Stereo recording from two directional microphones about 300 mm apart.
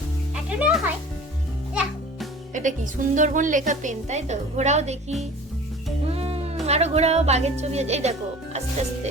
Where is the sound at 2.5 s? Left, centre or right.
Right.